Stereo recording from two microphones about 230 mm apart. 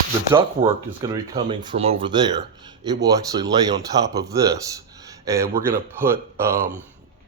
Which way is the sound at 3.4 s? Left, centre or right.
Centre.